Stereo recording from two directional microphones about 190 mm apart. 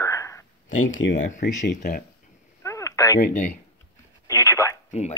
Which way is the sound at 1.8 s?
50° left (ahead or behind).